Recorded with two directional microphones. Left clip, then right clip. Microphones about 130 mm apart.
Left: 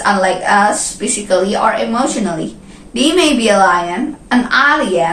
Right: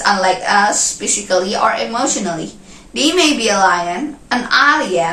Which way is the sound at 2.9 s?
25° right (ahead or behind).